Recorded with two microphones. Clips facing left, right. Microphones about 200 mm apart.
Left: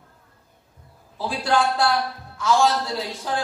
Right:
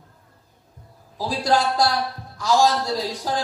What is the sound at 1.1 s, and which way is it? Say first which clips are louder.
A man's voice: right 1 dB; 35° right (ahead or behind).